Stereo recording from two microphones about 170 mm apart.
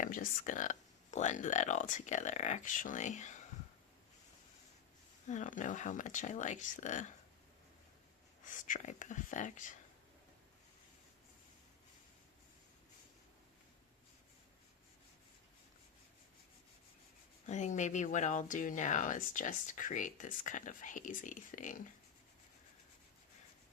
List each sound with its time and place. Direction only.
0.0 s speech: 50° left (ahead or behind)
5.3 s speech: 45° left (ahead or behind)
8.5 s speech: 50° left (ahead or behind)
17.4 s speech: 45° left (ahead or behind)